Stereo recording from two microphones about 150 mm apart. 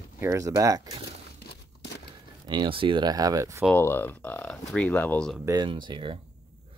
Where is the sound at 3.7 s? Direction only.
15° left (ahead or behind).